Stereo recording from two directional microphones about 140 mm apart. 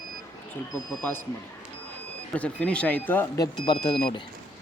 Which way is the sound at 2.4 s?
10° left (ahead or behind).